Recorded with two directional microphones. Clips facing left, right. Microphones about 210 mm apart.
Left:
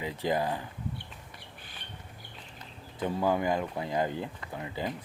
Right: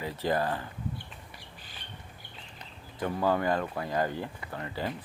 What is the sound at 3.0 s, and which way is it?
Speech, 15° left (ahead or behind).